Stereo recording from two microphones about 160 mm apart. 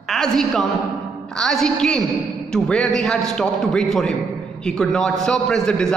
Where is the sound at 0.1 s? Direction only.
Centre (ahead or behind).